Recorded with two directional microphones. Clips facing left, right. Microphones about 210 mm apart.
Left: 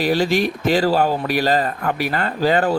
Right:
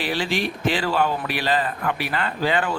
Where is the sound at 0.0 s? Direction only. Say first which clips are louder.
Left 7 dB; 40° left (ahead or behind).